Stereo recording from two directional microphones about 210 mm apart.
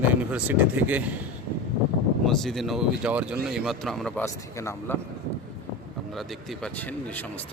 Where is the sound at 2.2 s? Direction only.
Centre (ahead or behind).